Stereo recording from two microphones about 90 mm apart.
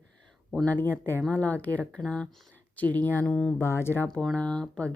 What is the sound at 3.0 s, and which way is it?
Speech, 20° left (ahead or behind).